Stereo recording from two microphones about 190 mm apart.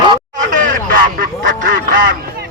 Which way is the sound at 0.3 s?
45° right (ahead or behind).